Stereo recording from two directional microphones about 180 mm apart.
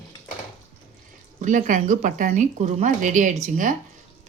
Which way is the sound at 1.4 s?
45° right (ahead or behind).